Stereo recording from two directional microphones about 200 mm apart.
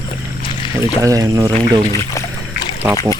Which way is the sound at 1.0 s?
15° right (ahead or behind).